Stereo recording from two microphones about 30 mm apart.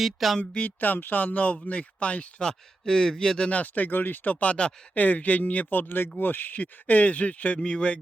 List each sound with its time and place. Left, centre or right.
0.0 s speech: centre
0.8 s speech: left
2.4 s speech: left
3.5 s speech: left
3.8 s speech: left
5.7 s speech: left
7.6 s speech: left